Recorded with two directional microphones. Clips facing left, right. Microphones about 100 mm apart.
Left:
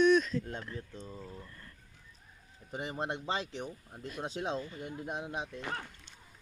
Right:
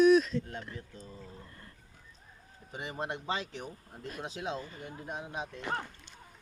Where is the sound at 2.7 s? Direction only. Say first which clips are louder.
Left 1 dB; 35° left (ahead or behind).